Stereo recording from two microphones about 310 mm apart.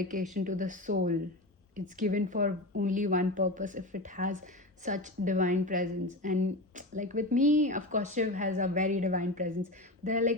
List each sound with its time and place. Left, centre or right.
0.0 s speech: right